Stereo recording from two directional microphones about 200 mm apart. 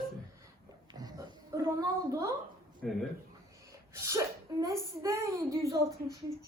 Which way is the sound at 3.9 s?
15° right (ahead or behind).